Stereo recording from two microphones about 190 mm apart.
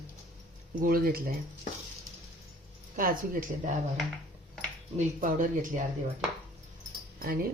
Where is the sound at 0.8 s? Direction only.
50° right (ahead or behind).